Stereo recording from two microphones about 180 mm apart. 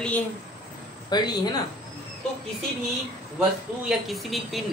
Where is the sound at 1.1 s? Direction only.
25° left (ahead or behind).